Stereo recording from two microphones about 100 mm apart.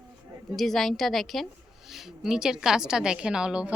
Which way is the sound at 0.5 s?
Centre (ahead or behind).